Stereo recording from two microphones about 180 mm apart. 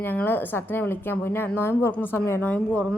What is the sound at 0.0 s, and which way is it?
Speech, 10° left (ahead or behind).